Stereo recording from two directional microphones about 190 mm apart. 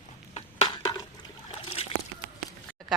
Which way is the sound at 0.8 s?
25° left (ahead or behind).